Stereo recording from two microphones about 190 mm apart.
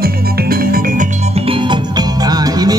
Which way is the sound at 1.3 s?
30° right (ahead or behind).